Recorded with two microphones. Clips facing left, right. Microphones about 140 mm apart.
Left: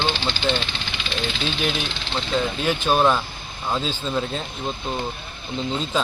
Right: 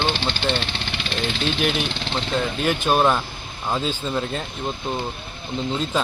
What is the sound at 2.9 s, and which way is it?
Speech, 5° right (ahead or behind).